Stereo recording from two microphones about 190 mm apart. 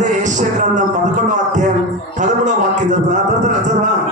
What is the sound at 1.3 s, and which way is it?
Music, 40° right (ahead or behind).